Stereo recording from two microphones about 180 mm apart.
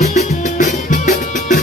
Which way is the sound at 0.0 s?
40° left (ahead or behind).